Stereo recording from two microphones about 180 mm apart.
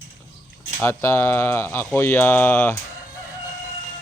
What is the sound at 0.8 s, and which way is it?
Speech, 15° left (ahead or behind).